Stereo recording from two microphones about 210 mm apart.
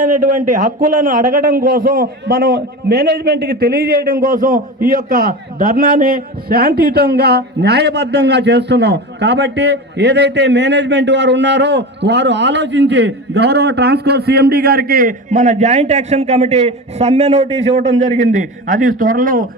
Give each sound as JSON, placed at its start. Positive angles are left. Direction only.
{"t": 0.3, "sound": "a man's voice", "side_deg": -40}